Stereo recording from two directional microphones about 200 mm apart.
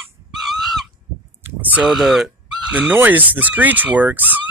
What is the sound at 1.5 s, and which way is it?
Speech, 5° right (ahead or behind).